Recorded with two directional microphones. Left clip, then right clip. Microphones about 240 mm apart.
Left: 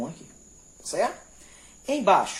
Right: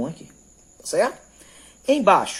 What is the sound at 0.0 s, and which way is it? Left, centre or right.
Cricket, right.